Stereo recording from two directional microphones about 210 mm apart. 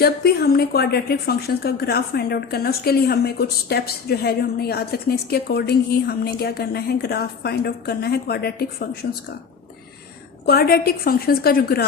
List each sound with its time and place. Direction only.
0.0 s a woman's voice: 50° left (ahead or behind)
10.4 s a woman's voice: 45° left (ahead or behind)